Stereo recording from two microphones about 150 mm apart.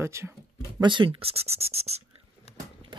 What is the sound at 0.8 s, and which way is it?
Speech, 35° right (ahead or behind).